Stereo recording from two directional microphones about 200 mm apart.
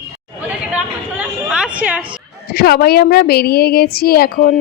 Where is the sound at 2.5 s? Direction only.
50° left (ahead or behind).